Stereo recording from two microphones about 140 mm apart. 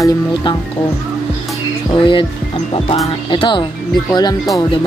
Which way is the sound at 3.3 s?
35° left (ahead or behind).